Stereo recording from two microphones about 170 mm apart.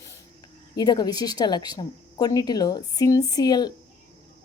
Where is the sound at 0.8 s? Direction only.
25° left (ahead or behind).